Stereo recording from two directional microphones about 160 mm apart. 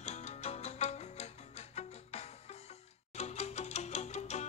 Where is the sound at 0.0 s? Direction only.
45° left (ahead or behind).